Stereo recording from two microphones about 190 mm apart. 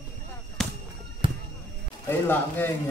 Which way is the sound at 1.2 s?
25° right (ahead or behind).